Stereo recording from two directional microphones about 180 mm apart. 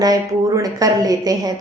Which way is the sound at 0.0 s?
20° right (ahead or behind).